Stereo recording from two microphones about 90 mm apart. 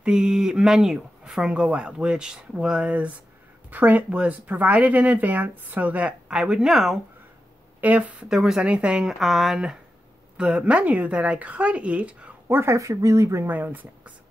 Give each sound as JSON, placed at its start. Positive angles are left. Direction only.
{"t": 0.0, "sound": "speech", "side_deg": -10}
{"t": 7.8, "sound": "speech", "side_deg": -15}
{"t": 8.3, "sound": "speech", "side_deg": -5}
{"t": 9.2, "sound": "speech", "side_deg": 0}
{"t": 12.4, "sound": "speech", "side_deg": -30}